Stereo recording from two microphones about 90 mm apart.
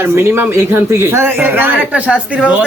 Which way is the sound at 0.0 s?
25° right (ahead or behind).